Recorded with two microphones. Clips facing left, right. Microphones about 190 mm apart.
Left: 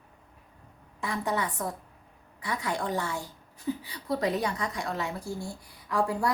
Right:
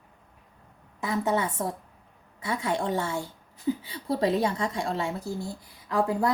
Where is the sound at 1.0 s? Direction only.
20° right (ahead or behind).